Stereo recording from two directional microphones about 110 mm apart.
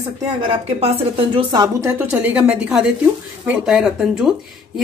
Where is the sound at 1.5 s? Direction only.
40° right (ahead or behind).